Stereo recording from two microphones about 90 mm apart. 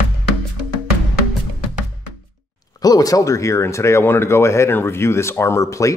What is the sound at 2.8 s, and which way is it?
Speech, 45° left (ahead or behind).